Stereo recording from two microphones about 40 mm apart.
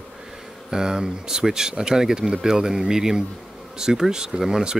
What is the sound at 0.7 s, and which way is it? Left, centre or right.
Speech, centre.